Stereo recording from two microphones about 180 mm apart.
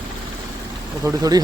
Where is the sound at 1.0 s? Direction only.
20° right (ahead or behind).